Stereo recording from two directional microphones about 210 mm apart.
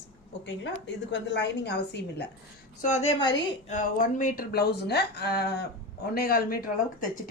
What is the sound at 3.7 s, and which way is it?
Speech, 40° left (ahead or behind).